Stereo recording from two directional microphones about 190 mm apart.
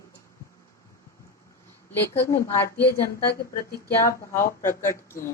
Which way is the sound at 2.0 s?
10° left (ahead or behind).